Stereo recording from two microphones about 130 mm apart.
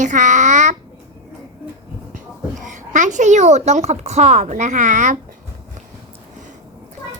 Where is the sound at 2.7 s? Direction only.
75° right (ahead or behind).